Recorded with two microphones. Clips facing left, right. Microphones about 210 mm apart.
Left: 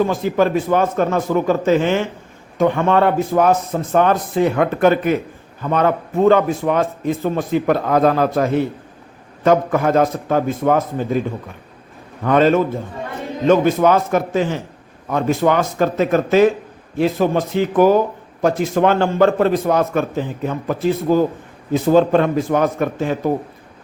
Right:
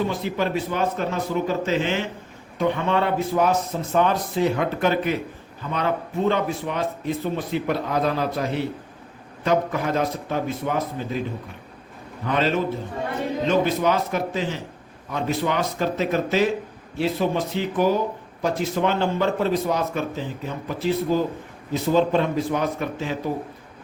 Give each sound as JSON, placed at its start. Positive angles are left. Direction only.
{"t": 0.0, "sound": "a man's voice", "side_deg": 45}
{"t": 12.2, "sound": "a man's voice", "side_deg": 50}
{"t": 13.8, "sound": "a man's voice", "side_deg": 50}